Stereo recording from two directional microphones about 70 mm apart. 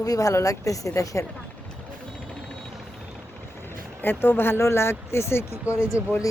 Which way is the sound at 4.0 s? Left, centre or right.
Left.